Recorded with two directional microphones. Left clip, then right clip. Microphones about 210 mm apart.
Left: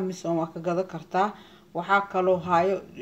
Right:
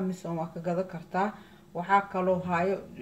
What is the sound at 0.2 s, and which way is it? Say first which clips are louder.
Speech: left 7 dB; 40° left (ahead or behind).